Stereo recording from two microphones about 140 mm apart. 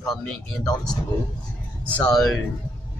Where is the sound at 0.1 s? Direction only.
5° left (ahead or behind).